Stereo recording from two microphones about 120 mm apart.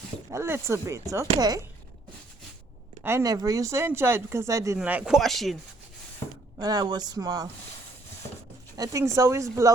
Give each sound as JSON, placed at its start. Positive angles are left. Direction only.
{"t": 0.3, "sound": "speech", "side_deg": -20}
{"t": 3.0, "sound": "speech", "side_deg": -20}
{"t": 4.8, "sound": "speech", "side_deg": -10}
{"t": 5.1, "sound": "speech", "side_deg": 0}
{"t": 6.6, "sound": "speech", "side_deg": -35}
{"t": 8.7, "sound": "speech", "side_deg": -30}